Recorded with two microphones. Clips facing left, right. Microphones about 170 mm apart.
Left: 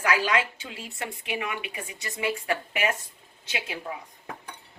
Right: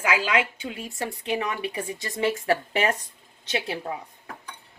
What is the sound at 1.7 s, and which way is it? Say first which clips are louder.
Speech: right 6 dB; 35° right (ahead or behind).